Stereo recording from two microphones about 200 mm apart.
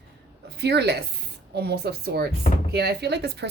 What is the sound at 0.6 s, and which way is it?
A woman's voice, 55° right (ahead or behind).